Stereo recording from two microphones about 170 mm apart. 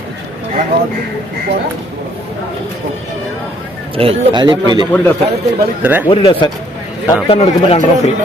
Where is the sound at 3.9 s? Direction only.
35° right (ahead or behind).